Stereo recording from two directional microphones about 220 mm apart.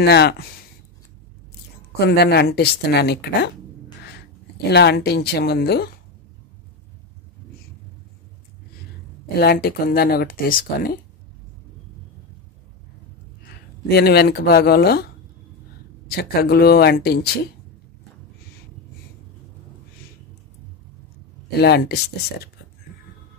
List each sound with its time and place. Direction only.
0.0 s speech: 50° left (ahead or behind)
2.0 s speech: 50° left (ahead or behind)
4.6 s speech: 50° left (ahead or behind)
9.4 s speech: 45° left (ahead or behind)
13.8 s speech: 45° left (ahead or behind)
16.1 s speech: 45° left (ahead or behind)
21.5 s speech: 45° left (ahead or behind)